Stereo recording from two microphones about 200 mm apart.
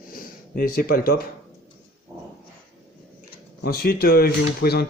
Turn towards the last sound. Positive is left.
turn(degrees=50)  # may be behind; listen again after turning